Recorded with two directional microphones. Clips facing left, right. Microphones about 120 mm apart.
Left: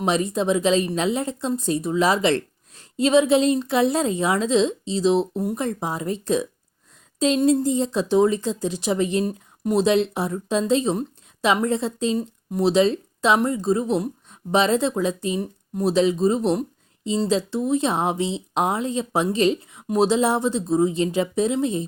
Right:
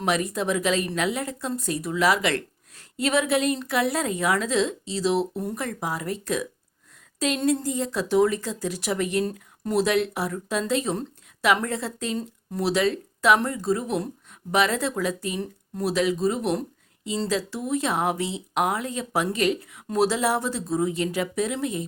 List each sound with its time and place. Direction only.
0.0 s speech: 25° left (ahead or behind)
16.6 s a sound: 25° left (ahead or behind)
17.2 s speech: 25° left (ahead or behind)